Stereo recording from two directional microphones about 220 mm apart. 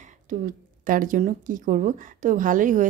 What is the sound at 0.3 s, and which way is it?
Speech, 35° right (ahead or behind).